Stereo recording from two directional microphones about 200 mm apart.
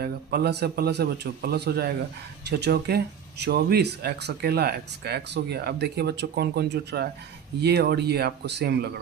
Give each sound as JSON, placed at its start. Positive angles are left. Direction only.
{"t": 0.0, "sound": "speech", "side_deg": -50}